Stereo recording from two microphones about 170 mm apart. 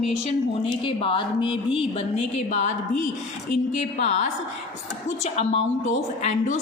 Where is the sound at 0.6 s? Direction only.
30° left (ahead or behind).